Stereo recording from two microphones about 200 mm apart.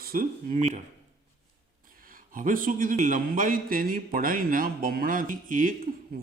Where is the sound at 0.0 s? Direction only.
45° right (ahead or behind).